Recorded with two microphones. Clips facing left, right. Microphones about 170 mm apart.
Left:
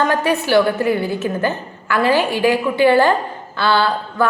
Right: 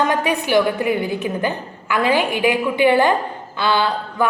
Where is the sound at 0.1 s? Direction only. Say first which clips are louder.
Left 2 dB; 15° right (ahead or behind).